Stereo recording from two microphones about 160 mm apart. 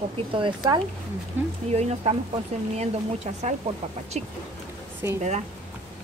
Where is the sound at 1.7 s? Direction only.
40° right (ahead or behind).